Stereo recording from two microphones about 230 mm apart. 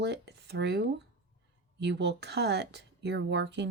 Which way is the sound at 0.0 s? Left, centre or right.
Right.